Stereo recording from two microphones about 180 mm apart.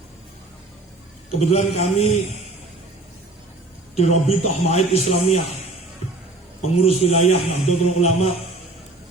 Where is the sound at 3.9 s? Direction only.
35° left (ahead or behind).